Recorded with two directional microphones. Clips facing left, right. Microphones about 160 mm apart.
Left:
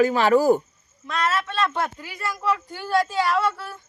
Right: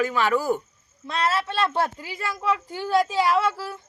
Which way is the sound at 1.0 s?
30° right (ahead or behind).